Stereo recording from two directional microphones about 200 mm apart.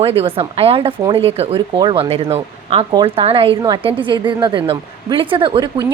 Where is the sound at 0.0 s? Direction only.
30° right (ahead or behind).